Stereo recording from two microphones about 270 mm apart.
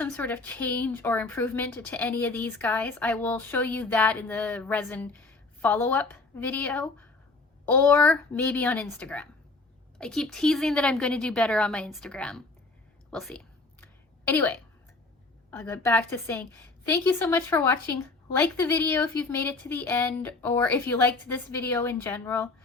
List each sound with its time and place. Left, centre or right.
0.0 s a woman's voice: centre
13.8 s a sound: centre
15.4 s a woman's voice: centre